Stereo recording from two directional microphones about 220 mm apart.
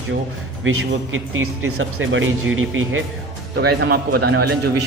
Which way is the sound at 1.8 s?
65° right (ahead or behind).